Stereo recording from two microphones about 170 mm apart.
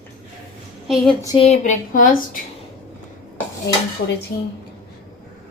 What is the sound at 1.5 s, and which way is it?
Speech, 50° left (ahead or behind).